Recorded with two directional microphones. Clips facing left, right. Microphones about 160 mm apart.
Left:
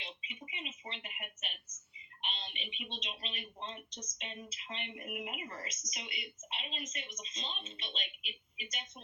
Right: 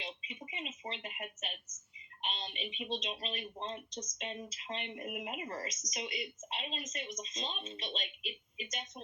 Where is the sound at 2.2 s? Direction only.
40° right (ahead or behind).